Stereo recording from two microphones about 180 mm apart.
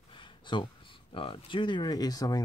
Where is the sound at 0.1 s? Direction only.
25° left (ahead or behind).